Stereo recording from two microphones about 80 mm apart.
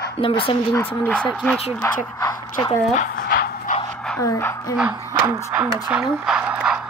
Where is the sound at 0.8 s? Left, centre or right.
Left.